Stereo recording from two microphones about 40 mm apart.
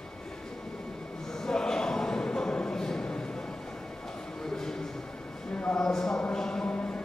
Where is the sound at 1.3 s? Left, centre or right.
Centre.